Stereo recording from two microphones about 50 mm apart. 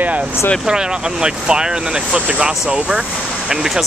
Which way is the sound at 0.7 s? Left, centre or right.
Centre.